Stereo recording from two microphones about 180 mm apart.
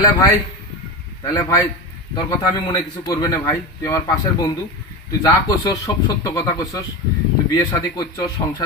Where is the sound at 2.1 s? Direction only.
25° left (ahead or behind).